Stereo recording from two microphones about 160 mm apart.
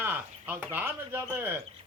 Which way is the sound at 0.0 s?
15° right (ahead or behind).